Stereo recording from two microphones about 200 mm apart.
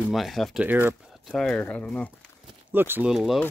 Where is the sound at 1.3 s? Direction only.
5° left (ahead or behind).